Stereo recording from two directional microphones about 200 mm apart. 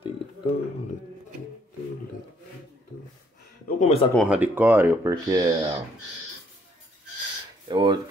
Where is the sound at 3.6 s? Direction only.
35° left (ahead or behind).